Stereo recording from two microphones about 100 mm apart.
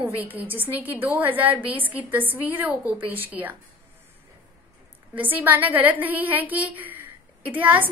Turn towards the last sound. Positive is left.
turn(degrees=-15)  # may be behind; listen again after turning